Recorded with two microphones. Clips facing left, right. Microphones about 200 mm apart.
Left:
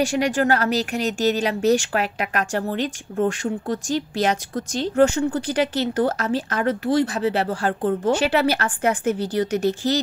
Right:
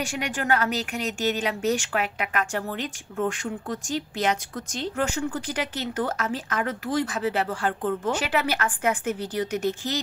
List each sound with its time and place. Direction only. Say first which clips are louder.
0.4 s a woman's voice: left 2 dB; 35° left (ahead or behind)